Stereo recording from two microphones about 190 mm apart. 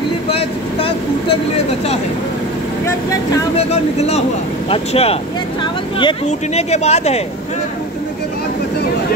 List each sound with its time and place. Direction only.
0.3 s vehicle: 30° left (ahead or behind)
3.5 s speech: 35° left (ahead or behind)